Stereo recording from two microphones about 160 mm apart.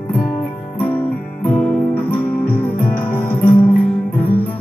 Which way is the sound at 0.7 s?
10° left (ahead or behind).